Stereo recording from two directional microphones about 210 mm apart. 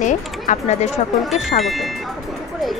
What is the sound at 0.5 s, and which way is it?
Speech, 30° left (ahead or behind).